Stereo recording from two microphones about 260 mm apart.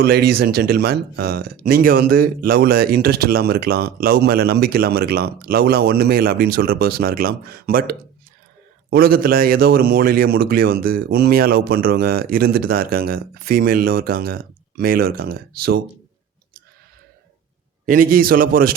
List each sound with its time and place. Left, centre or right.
0.1 s speech: right
17.8 s speech: right